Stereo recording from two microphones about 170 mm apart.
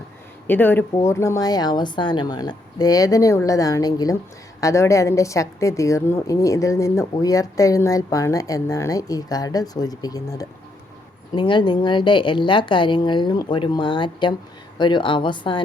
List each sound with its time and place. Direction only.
0.4 s a woman's voice: 10° left (ahead or behind); by 15.6 s 30° left (ahead or behind)